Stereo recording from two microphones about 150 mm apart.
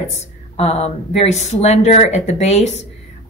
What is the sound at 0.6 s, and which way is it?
Speech, 45° left (ahead or behind).